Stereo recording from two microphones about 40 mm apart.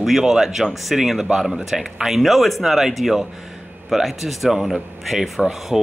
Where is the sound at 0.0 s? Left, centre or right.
Centre.